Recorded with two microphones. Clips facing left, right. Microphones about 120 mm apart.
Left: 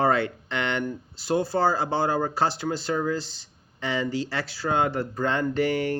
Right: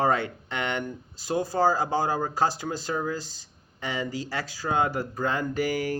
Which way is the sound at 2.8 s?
15° right (ahead or behind).